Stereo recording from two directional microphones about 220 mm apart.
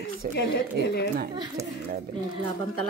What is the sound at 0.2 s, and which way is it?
Speech, 40° right (ahead or behind).